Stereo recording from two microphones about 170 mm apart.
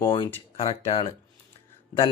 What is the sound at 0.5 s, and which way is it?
Speech, 35° left (ahead or behind).